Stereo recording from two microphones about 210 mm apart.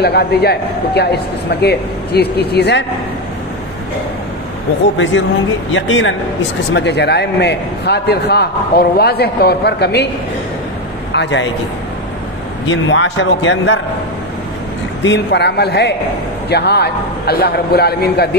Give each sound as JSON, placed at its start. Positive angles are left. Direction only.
{"t": 0.0, "sound": "a man's voice", "side_deg": 50}
{"t": 5.7, "sound": "a man's voice", "side_deg": 65}
{"t": 11.1, "sound": "speech", "side_deg": 60}
{"t": 12.6, "sound": "speech", "side_deg": 65}
{"t": 15.0, "sound": "a man's voice", "side_deg": 55}